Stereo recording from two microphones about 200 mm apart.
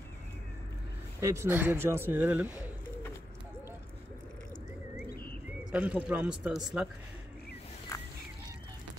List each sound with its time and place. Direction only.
1.2 s speech: 15° right (ahead or behind)
5.0 s bird: 50° left (ahead or behind)
5.7 s speech: 5° right (ahead or behind)
7.9 s a sound: 15° left (ahead or behind)